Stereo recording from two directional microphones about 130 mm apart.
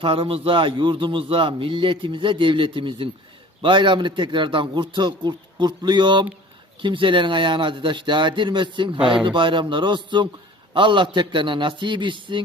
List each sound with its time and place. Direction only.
0.0 s a man's voice: 45° right (ahead or behind)